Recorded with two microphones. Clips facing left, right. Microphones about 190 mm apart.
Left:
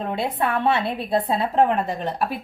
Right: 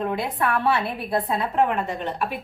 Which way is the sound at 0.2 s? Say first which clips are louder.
Left 1 dB; 25° left (ahead or behind).